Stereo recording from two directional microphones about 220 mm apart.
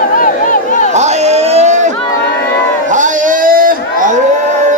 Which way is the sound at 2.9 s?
35° right (ahead or behind).